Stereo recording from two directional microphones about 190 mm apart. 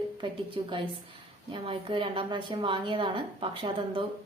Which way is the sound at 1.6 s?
25° right (ahead or behind).